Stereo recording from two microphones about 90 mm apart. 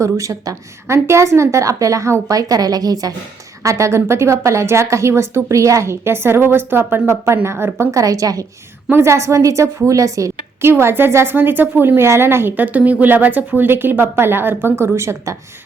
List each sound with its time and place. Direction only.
0.0 s a woman's voice: 40° right (ahead or behind)
8.9 s a woman's voice: 30° right (ahead or behind)